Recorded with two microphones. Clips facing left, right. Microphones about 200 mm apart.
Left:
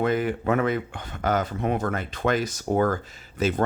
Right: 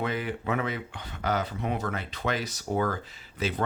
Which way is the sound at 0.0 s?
45° left (ahead or behind).